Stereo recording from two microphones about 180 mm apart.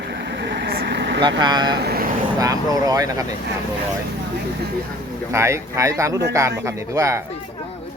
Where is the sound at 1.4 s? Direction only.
25° right (ahead or behind).